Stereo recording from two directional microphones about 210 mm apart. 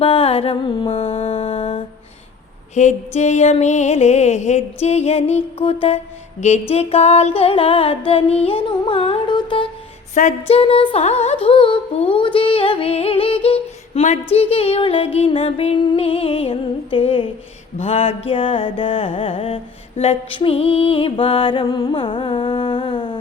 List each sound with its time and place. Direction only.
0.0 s music: 25° left (ahead or behind)
10.2 s music: 35° left (ahead or behind); by 23.1 s 20° left (ahead or behind)